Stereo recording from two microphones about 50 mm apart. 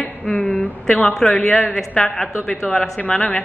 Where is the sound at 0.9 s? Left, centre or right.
Centre.